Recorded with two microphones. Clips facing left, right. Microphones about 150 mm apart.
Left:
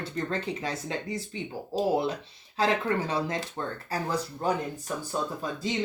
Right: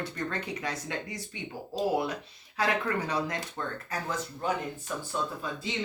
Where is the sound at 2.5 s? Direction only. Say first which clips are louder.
Left 3 dB; 25° left (ahead or behind).